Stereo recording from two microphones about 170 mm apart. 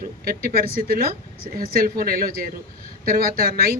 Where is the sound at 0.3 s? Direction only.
65° right (ahead or behind).